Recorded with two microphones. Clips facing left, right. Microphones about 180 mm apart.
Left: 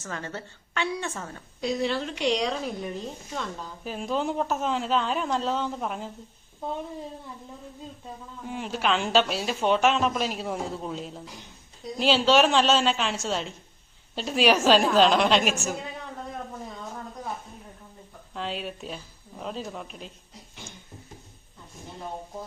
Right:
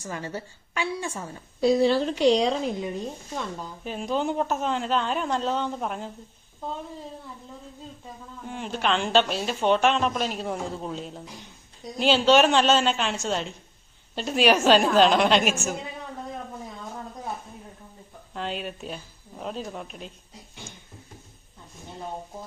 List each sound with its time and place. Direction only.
0.0 s a woman's voice: 10° right (ahead or behind)
1.6 s speech: 35° right (ahead or behind)
3.8 s a woman's voice: centre (ahead or behind)
8.4 s a woman's voice: 5° left (ahead or behind)
18.3 s a woman's voice: centre (ahead or behind)